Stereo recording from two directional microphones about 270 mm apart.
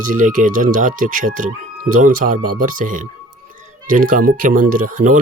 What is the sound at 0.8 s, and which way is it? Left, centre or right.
Speech, right.